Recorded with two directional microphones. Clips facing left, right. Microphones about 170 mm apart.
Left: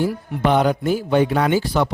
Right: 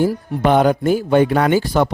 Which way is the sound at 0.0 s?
50° right (ahead or behind).